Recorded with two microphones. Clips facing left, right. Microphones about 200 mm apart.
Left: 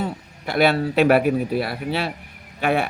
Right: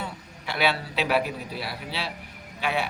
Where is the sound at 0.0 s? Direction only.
45° left (ahead or behind).